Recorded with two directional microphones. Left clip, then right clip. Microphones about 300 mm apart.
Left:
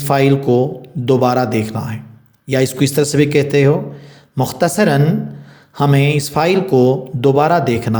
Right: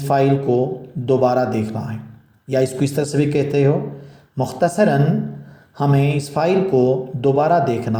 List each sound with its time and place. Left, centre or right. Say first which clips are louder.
0.0 s speech: left 3 dB; left